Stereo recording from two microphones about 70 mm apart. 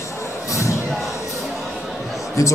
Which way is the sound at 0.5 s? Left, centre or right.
Left.